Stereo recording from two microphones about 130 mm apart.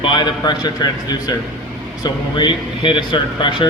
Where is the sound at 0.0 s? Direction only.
40° left (ahead or behind).